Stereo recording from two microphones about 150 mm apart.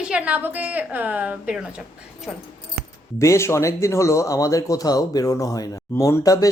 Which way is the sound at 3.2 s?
20° left (ahead or behind).